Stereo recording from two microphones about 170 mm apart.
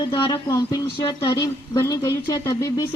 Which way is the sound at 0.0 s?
25° left (ahead or behind).